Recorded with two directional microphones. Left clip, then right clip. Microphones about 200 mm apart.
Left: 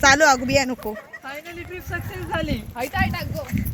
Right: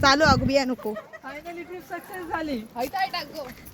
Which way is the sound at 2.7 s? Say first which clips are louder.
Left 2 dB; 15° right (ahead or behind).